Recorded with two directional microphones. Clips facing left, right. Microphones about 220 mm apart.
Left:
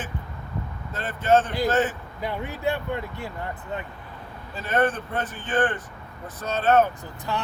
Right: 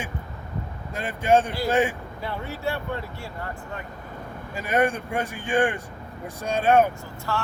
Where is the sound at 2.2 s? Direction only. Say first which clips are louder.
Left 3 dB; 15° left (ahead or behind).